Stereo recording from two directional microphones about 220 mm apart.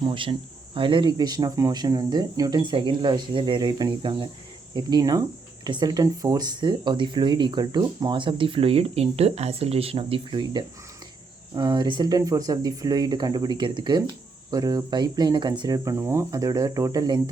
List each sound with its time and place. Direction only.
0.0 s speech: 25° right (ahead or behind)